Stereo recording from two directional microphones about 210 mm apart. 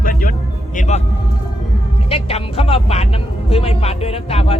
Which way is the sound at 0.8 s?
35° left (ahead or behind).